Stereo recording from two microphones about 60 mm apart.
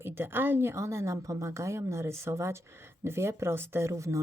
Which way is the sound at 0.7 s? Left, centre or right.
Right.